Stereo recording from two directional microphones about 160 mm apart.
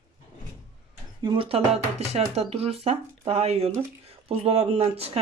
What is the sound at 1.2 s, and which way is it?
Speech, 30° right (ahead or behind).